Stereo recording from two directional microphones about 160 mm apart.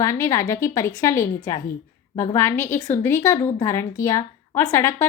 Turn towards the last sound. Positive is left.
turn(degrees=15)  # may be behind; listen again after turning